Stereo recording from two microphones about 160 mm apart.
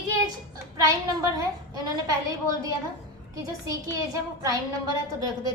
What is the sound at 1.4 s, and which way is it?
Speech, 25° right (ahead or behind).